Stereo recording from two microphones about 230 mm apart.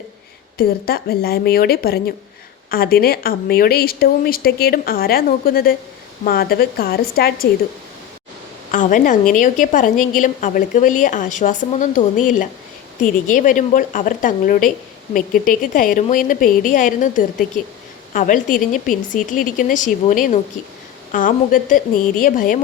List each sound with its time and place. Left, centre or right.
0.6 s a woman's voice: left
8.7 s a woman's voice: left